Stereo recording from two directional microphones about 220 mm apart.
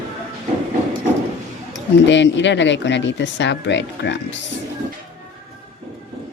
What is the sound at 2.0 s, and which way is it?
Speech, 55° left (ahead or behind).